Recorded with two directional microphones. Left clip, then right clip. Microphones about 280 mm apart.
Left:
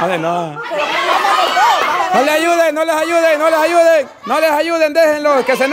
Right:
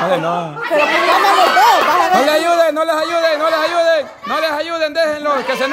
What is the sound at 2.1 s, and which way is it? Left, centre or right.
A man's voice, centre.